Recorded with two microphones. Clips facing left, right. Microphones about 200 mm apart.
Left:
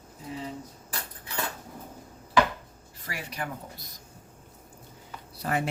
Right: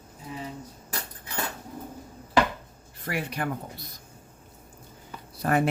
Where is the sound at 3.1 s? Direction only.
60° right (ahead or behind).